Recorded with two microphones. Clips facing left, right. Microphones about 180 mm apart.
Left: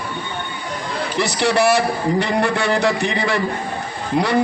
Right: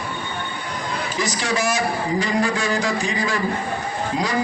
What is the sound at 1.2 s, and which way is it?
A man's voice, 65° left (ahead or behind).